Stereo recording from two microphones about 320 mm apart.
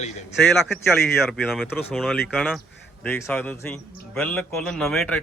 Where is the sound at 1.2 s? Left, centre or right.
Centre.